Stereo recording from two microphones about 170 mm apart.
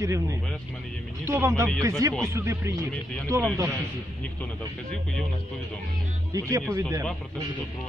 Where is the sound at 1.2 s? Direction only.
15° right (ahead or behind).